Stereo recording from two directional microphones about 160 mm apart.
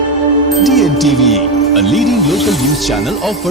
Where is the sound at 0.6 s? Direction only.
Centre (ahead or behind).